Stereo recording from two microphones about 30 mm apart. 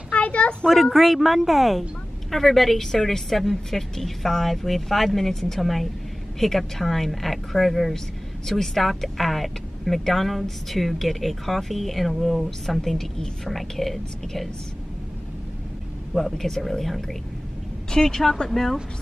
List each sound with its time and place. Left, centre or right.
0.1 s a sound: left
0.9 s a woman's voice: centre
12.4 s a woman's voice: centre
16.2 s speech: centre
17.9 s a woman's voice: centre